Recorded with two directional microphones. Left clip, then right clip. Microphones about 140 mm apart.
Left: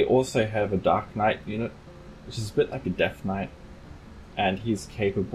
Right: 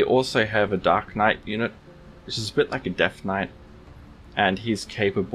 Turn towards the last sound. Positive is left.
turn(degrees=-30)  # may be behind; listen again after turning